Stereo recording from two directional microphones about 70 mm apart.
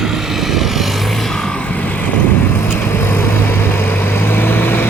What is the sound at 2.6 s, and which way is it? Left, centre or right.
Vehicle, left.